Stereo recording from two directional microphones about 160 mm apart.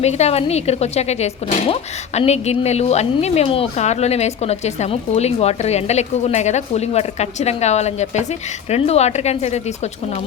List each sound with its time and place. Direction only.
0.0 s speech: 45° left (ahead or behind)